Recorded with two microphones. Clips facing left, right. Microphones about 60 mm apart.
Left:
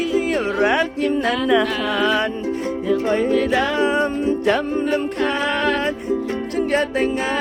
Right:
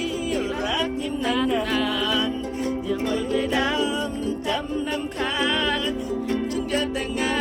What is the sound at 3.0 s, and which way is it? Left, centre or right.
Music, left.